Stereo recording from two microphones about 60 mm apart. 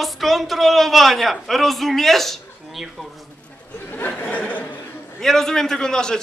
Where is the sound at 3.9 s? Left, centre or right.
Left.